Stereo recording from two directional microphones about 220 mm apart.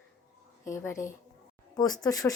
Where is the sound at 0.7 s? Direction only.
15° left (ahead or behind).